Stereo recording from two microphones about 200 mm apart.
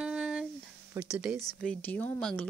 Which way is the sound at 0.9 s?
5° right (ahead or behind).